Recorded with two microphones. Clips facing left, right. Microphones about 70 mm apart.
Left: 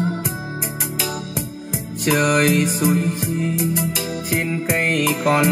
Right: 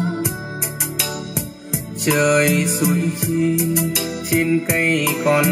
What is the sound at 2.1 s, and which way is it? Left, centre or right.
Music, centre.